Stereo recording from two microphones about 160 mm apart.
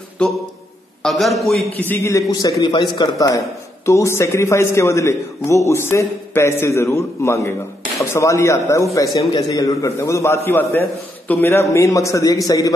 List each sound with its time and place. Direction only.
0.2 s a man's voice: 5° left (ahead or behind)
1.8 s a man's voice: 15° left (ahead or behind)